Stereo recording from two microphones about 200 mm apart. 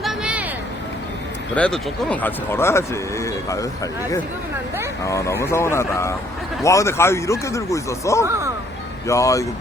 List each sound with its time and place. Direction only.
0.0 s a sound: 5° right (ahead or behind)
1.5 s speech: 5° left (ahead or behind)
5.0 s speech: 15° left (ahead or behind)